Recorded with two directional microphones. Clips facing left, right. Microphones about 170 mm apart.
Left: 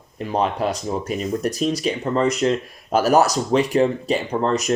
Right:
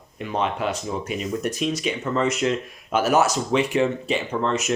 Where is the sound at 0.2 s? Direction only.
35° left (ahead or behind).